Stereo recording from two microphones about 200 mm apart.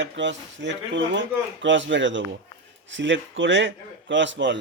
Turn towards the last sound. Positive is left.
turn(degrees=-65)  # may be behind; listen again after turning